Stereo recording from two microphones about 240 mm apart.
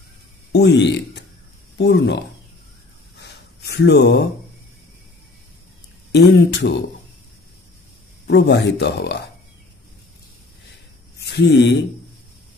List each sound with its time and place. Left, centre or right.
0.5 s speech: left
3.2 s gasp: left
6.1 s speech: left
8.3 s speech: left
11.2 s speech: left